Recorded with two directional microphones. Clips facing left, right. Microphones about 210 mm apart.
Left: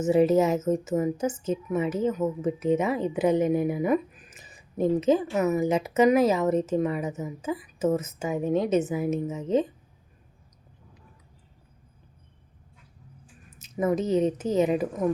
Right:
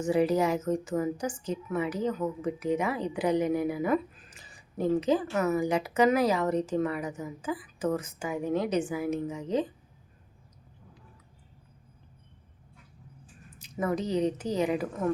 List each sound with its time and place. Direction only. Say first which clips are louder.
0.0 s a woman's voice: left 5 dB; 25° left (ahead or behind)
13.6 s a woman's voice: left 5 dB; 20° left (ahead or behind)